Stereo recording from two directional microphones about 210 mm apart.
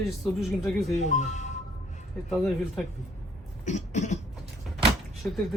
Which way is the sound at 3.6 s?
35° left (ahead or behind).